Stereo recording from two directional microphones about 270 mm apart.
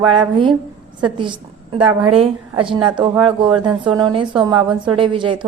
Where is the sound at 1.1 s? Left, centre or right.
Centre.